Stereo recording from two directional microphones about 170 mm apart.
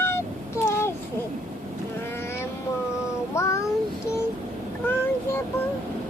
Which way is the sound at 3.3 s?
20° left (ahead or behind).